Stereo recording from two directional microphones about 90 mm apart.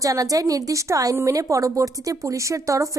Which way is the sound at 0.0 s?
40° right (ahead or behind).